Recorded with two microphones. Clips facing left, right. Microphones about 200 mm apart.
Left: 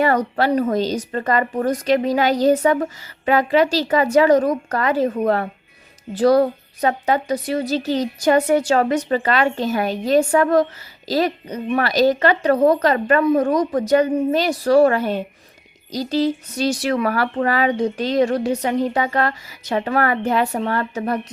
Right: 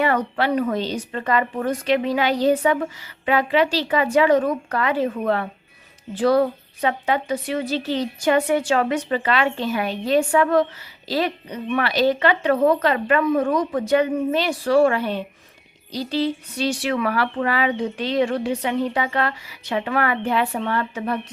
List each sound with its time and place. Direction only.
0.0 s speech: 40° left (ahead or behind)